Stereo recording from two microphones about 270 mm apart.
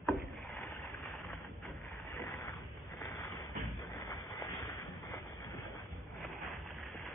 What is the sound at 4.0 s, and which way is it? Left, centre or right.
Vehicle, centre.